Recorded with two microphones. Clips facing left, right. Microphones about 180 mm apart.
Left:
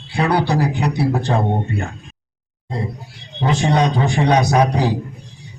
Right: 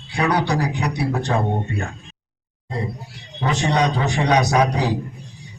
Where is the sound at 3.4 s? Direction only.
30° left (ahead or behind).